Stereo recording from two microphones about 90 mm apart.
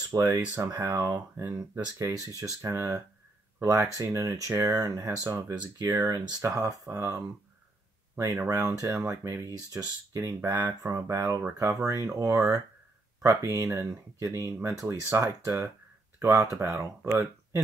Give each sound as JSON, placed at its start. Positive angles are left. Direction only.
{"t": 0.2, "sound": "speech", "side_deg": -25}
{"t": 1.5, "sound": "speech", "side_deg": -35}